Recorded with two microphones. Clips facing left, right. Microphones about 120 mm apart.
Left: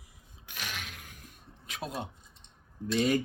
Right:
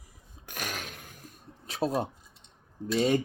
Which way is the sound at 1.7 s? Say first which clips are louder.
Right 9 dB; 35° right (ahead or behind).